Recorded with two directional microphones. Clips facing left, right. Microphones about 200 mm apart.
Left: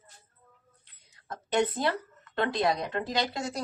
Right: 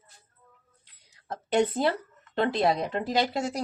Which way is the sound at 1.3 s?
30° right (ahead or behind).